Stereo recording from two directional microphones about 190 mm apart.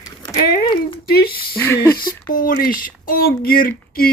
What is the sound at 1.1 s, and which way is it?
Speech, 55° left (ahead or behind).